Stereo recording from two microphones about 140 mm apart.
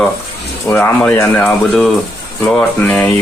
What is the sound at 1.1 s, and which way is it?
Speech, 15° left (ahead or behind).